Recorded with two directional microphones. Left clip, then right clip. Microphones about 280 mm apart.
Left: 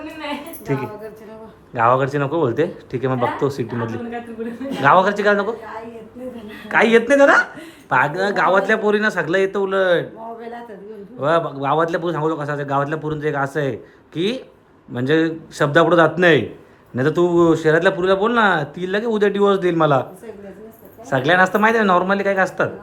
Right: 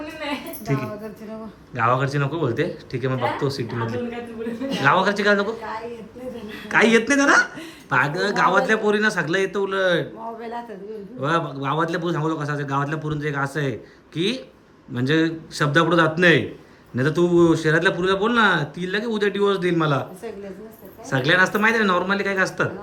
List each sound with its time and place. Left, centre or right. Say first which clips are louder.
0.7 s speech: left 3 dB; centre
6.7 s speech: left 3 dB; centre
21.1 s speech: left 3 dB; centre